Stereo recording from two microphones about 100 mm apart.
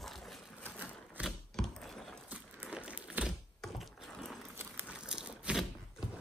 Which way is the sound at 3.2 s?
Centre (ahead or behind).